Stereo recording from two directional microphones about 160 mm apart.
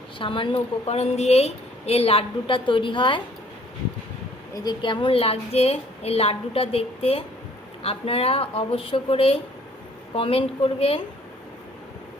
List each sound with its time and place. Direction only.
0.2 s a woman's voice: 30° left (ahead or behind)
4.5 s a woman's voice: 25° left (ahead or behind)